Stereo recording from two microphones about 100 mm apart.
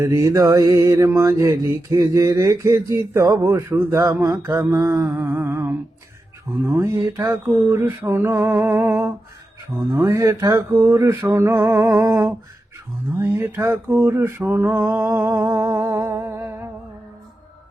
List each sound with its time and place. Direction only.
0.0 s mantra: 30° right (ahead or behind)
3.2 s mantra: 35° right (ahead or behind)
5.1 s mantra: 20° right (ahead or behind)
15.4 s music: 25° right (ahead or behind)